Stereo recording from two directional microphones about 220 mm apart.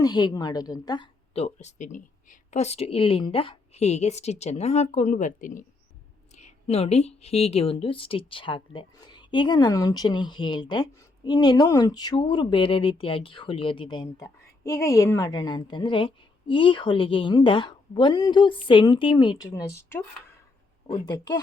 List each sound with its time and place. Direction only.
0.0 s a woman's voice: 20° left (ahead or behind)
21.1 s a woman's voice: 20° left (ahead or behind)